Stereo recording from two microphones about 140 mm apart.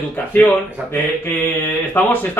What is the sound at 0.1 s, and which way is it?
A man's voice, 15° left (ahead or behind).